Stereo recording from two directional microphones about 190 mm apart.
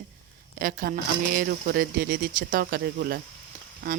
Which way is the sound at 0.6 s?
50° right (ahead or behind).